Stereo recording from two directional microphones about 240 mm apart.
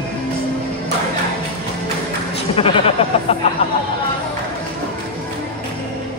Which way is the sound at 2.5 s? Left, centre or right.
Left.